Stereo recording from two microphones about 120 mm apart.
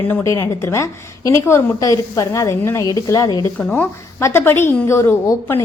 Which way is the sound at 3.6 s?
10° left (ahead or behind).